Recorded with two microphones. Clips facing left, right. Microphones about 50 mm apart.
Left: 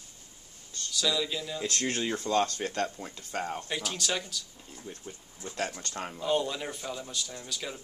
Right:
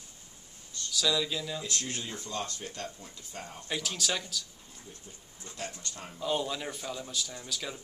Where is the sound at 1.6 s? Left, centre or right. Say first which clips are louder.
Left 6 dB; left.